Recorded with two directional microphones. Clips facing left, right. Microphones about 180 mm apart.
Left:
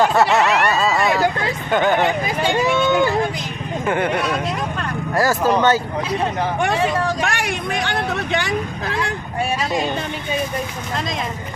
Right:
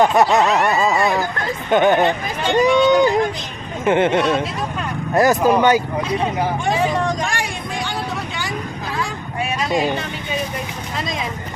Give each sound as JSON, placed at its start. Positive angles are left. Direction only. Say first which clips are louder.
{"t": 0.0, "sound": "a sound", "louder": "right 1 dB", "side_deg": -15}
{"t": 1.7, "sound": "speech", "louder": "right 3 dB", "side_deg": -20}
{"t": 2.0, "sound": "speech", "louder": "even", "side_deg": 10}
{"t": 2.6, "sound": "a sound", "louder": "right 5 dB", "side_deg": -15}
{"t": 3.8, "sound": "speech", "louder": "right 5 dB", "side_deg": -20}
{"t": 6.0, "sound": "speech", "louder": "right 1 dB", "side_deg": 5}
{"t": 6.9, "sound": "vehicle", "louder": "right 1 dB", "side_deg": 5}
{"t": 7.2, "sound": "vehicle", "louder": "left 2 dB", "side_deg": 65}
{"t": 9.6, "sound": "a sound", "louder": "right 6 dB", "side_deg": 0}